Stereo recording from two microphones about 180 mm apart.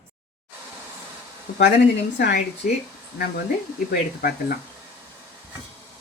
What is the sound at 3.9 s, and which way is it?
Speech, 55° left (ahead or behind).